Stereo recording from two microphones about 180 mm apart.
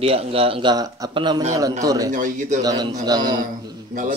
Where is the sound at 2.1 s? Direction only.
45° right (ahead or behind).